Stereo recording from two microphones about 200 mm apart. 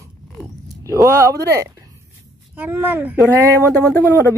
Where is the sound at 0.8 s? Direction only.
15° right (ahead or behind).